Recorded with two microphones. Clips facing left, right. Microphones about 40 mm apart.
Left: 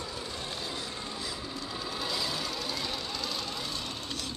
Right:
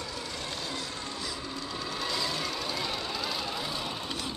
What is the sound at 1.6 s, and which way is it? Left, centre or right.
Vehicle, centre.